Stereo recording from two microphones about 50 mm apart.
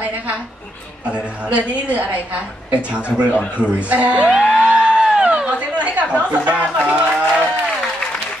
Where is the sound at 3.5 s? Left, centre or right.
Right.